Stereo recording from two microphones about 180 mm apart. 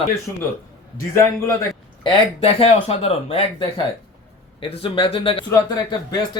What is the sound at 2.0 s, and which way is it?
Speech, 30° left (ahead or behind).